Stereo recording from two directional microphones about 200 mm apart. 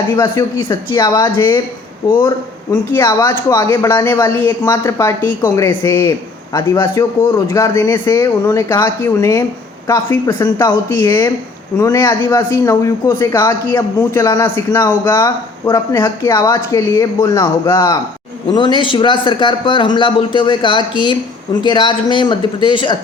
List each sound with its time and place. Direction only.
0.2 s speech: 15° left (ahead or behind)
2.9 s a man's voice: 15° left (ahead or behind)